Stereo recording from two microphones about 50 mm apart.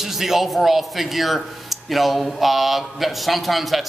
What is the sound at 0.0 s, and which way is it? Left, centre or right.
Speech, centre.